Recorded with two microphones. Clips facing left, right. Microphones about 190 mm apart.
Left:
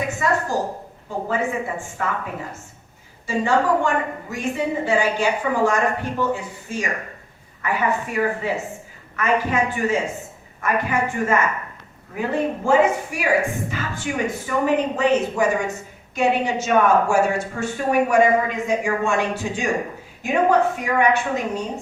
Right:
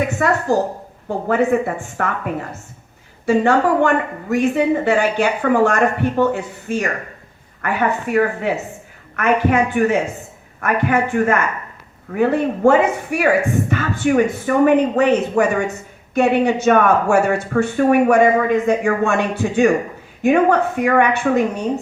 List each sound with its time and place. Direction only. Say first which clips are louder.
0.2 s a woman's voice: right 5 dB; 60° right (ahead or behind)
3.2 s a woman's voice: right 5 dB; 65° right (ahead or behind)